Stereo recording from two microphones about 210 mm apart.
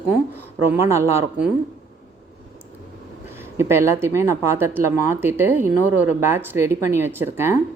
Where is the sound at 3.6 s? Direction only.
10° right (ahead or behind).